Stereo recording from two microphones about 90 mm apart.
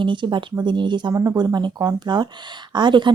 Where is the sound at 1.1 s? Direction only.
45° right (ahead or behind).